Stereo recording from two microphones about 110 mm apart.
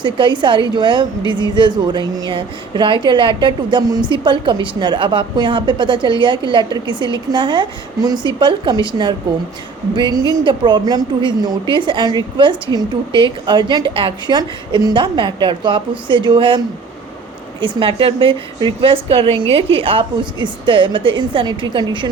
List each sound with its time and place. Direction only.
0.0 s a woman's voice: 45° right (ahead or behind)